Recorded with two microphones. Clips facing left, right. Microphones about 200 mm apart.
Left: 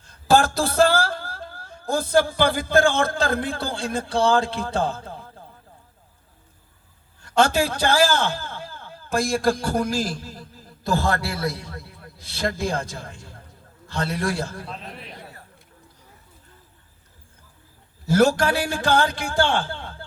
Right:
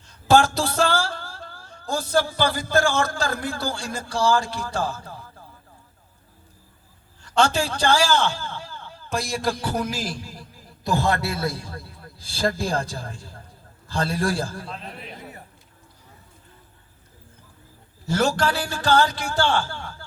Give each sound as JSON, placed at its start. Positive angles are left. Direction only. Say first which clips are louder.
{"t": 0.3, "sound": "a sound", "louder": "left 1 dB", "side_deg": 55}
{"t": 3.2, "sound": "music", "louder": "left 3 dB", "side_deg": 55}
{"t": 7.4, "sound": "a man's voice", "louder": "right 1 dB", "side_deg": 55}
{"t": 9.6, "sound": "a man's voice", "louder": "left 3 dB", "side_deg": -5}
{"t": 14.7, "sound": "a man's voice", "louder": "even", "side_deg": 0}
{"t": 18.4, "sound": "music", "louder": "left 1 dB", "side_deg": 60}